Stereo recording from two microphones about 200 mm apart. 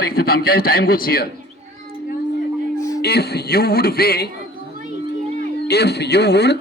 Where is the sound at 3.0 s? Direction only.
55° left (ahead or behind).